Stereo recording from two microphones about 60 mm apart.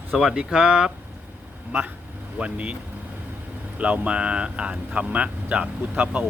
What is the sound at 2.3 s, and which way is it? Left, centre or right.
Speech, right.